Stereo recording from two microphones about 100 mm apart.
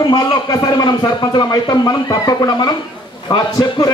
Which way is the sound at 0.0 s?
45° left (ahead or behind).